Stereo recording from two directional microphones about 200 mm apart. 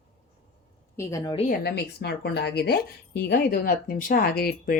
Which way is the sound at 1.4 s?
55° left (ahead or behind).